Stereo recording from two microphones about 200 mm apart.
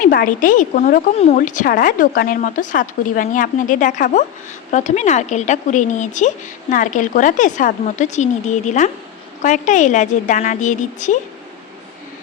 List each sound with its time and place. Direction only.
0.0 s a woman's voice: 45° left (ahead or behind)